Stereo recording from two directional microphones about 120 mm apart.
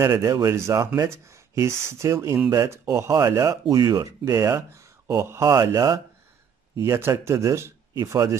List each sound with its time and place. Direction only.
0.0 s speech: 30° right (ahead or behind)